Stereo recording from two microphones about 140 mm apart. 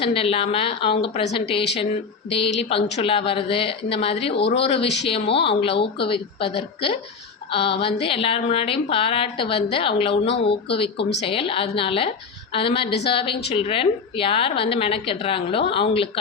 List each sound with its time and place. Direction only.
0.0 s a woman's voice: 40° left (ahead or behind)